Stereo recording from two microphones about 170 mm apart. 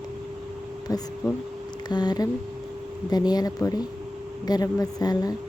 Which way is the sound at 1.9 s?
25° left (ahead or behind).